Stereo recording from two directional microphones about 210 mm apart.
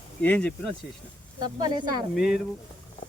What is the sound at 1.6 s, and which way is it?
Speech, 20° right (ahead or behind).